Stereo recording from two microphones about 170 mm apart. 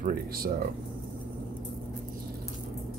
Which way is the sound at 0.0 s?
55° right (ahead or behind).